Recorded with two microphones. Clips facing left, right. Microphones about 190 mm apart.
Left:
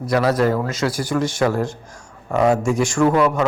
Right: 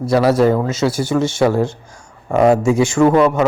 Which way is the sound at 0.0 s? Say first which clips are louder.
Right 4 dB; 25° right (ahead or behind).